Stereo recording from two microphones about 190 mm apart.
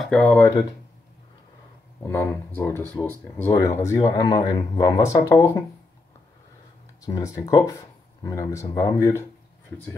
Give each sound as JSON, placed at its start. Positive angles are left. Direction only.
{"t": 0.0, "sound": "speech", "side_deg": 5}
{"t": 2.0, "sound": "speech", "side_deg": 15}
{"t": 7.1, "sound": "speech", "side_deg": 15}